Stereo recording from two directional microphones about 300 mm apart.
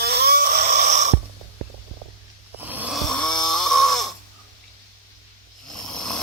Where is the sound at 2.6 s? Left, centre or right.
Centre.